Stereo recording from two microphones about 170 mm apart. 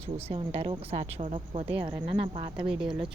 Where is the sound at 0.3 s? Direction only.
35° right (ahead or behind).